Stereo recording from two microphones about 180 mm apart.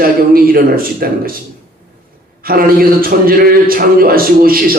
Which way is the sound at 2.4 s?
55° right (ahead or behind).